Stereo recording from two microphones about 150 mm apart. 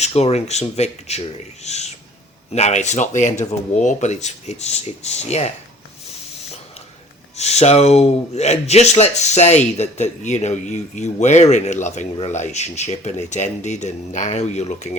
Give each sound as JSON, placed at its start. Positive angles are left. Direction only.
{"t": 0.0, "sound": "speech", "side_deg": 45}
{"t": 7.3, "sound": "speech", "side_deg": 45}